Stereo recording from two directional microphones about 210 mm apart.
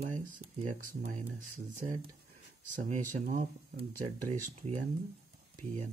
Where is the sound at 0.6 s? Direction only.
35° right (ahead or behind).